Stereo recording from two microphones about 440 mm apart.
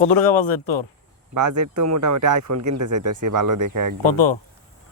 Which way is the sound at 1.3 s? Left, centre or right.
Right.